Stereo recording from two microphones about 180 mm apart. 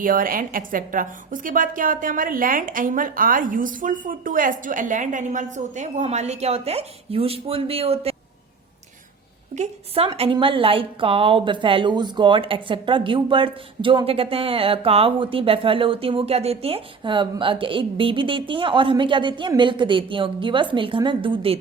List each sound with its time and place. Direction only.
0.0 s a woman's voice: 50° right (ahead or behind); by 8.1 s 35° right (ahead or behind)
9.6 s a woman's voice: 30° right (ahead or behind)